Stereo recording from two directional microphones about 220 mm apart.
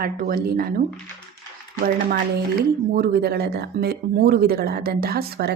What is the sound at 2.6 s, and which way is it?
Speech, 45° right (ahead or behind).